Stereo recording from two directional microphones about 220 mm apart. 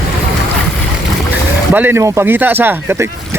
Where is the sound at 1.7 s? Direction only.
10° right (ahead or behind).